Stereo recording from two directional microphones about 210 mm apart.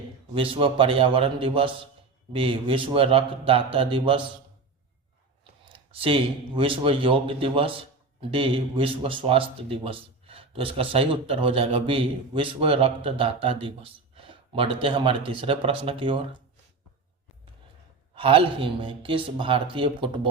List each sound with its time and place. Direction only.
0.3 s speech: 25° right (ahead or behind)
5.6 s speech: 25° right (ahead or behind)
18.1 s speech: 25° right (ahead or behind)